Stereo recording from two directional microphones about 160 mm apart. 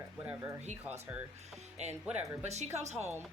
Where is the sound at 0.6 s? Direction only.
45° right (ahead or behind).